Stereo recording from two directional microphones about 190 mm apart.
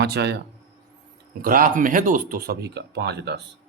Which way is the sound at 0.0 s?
60° right (ahead or behind).